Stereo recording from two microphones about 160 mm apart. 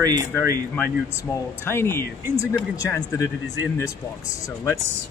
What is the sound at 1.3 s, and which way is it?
Speech, 15° left (ahead or behind).